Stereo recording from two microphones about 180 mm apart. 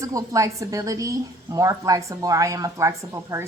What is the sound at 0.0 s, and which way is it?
A woman's voice, 20° right (ahead or behind).